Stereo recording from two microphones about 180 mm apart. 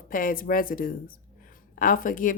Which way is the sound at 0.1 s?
50° left (ahead or behind).